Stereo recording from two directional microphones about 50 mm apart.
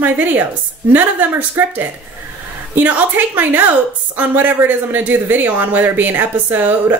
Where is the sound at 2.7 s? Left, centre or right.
Right.